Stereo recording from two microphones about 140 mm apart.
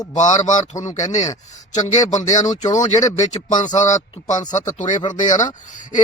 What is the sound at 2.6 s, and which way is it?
Speech, 55° left (ahead or behind).